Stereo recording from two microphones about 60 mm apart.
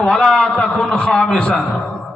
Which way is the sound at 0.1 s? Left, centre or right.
Centre.